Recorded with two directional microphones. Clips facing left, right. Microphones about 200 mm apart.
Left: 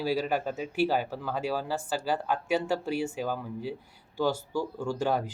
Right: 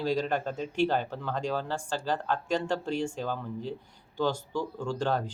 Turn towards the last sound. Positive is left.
turn(degrees=10)  # may be behind; listen again after turning